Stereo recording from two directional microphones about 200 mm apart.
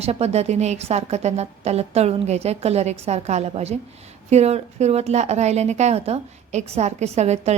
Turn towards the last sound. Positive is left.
turn(degrees=-35)  # may be behind; listen again after turning